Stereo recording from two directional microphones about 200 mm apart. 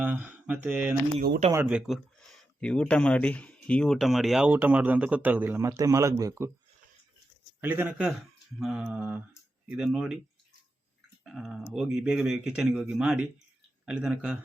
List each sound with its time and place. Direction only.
0.0 s speech: 10° right (ahead or behind)
1.2 s speech: 50° right (ahead or behind)
1.6 s speech: 5° right (ahead or behind)
7.6 s speech: 10° right (ahead or behind)
11.2 s speech: centre (ahead or behind)